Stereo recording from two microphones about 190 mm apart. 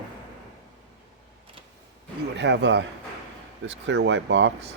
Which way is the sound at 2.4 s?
65° right (ahead or behind).